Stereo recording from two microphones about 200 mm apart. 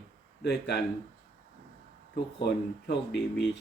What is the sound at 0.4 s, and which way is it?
Speech, 55° left (ahead or behind).